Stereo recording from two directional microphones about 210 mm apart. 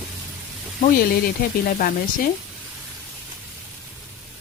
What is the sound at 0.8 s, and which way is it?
Speech, 45° left (ahead or behind).